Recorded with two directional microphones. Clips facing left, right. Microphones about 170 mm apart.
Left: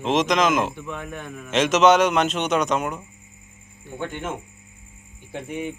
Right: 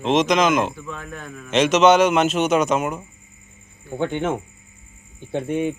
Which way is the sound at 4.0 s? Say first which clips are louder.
Right 7 dB; 65° right (ahead or behind).